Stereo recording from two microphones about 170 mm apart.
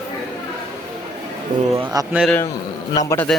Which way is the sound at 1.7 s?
20° right (ahead or behind).